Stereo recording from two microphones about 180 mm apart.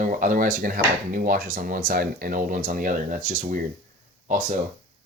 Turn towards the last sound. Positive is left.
turn(degrees=-45)  # may be behind; listen again after turning